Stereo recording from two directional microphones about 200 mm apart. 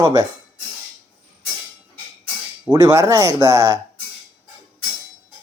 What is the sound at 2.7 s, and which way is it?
Speech, 15° right (ahead or behind).